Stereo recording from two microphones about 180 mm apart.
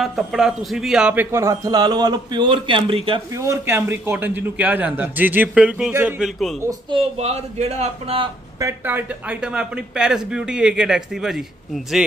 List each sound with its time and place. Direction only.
0.0 s a man's voice: centre (ahead or behind); by 3.2 s 30° right (ahead or behind)
3.3 s a man's voice: 15° right (ahead or behind)
6.9 s speech: 30° right (ahead or behind)
8.5 s speech: 15° right (ahead or behind)